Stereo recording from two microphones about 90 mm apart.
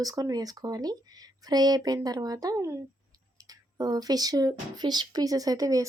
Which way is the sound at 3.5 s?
45° right (ahead or behind).